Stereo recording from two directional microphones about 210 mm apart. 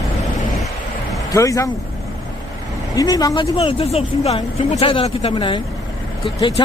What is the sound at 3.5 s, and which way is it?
Speech, 30° left (ahead or behind).